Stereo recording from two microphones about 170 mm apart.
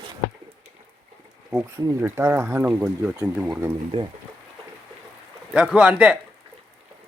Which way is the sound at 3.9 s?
35° right (ahead or behind).